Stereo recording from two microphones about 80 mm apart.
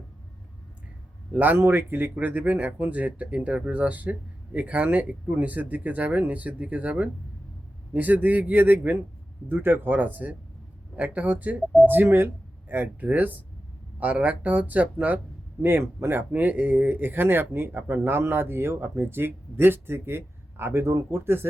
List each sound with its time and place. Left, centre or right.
1.3 s speech: right
15.6 s speech: right